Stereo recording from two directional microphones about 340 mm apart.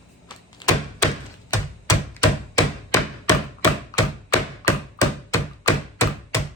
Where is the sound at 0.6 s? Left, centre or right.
Centre.